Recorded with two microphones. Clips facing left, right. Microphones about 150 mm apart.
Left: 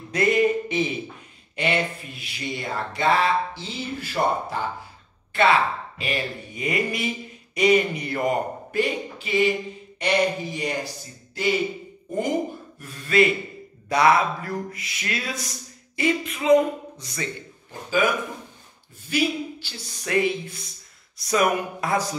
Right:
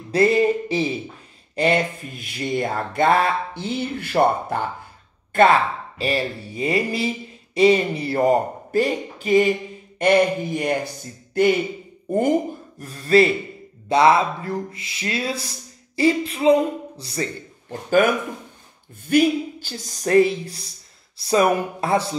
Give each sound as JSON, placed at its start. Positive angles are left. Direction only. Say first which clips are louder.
{"t": 0.1, "sound": "speech", "louder": "right 3 dB", "side_deg": -30}
{"t": 5.3, "sound": "speech", "louder": "right 4 dB", "side_deg": -45}
{"t": 9.9, "sound": "a sound", "louder": "right 6 dB", "side_deg": -50}
{"t": 12.1, "sound": "speech", "louder": "right 6 dB", "side_deg": -55}
{"t": 12.7, "sound": "speech", "louder": "right 5 dB", "side_deg": -35}
{"t": 13.8, "sound": "speech", "louder": "right 3 dB", "side_deg": -25}
{"t": 17.6, "sound": "speech", "louder": "right 7 dB", "side_deg": -55}
{"t": 19.0, "sound": "speech", "louder": "right 7 dB", "side_deg": -50}